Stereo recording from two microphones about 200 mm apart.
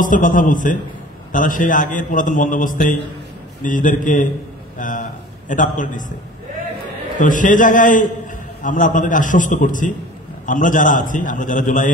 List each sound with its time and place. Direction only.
0.0 s a man's voice: 40° left (ahead or behind)
7.2 s a man's voice: 40° left (ahead or behind)